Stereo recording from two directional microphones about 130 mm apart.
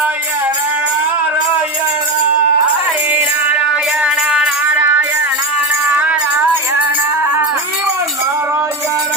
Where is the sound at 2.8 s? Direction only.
15° right (ahead or behind).